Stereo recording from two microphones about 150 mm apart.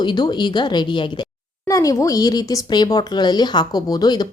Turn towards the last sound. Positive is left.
turn(degrees=25)  # may be behind; listen again after turning